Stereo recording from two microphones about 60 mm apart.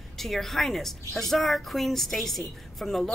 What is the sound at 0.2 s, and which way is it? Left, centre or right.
A woman's voice, centre.